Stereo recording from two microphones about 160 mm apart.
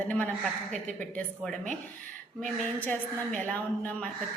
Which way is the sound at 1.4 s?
5° left (ahead or behind).